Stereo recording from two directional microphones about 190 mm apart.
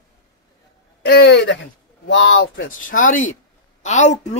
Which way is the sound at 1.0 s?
60° left (ahead or behind).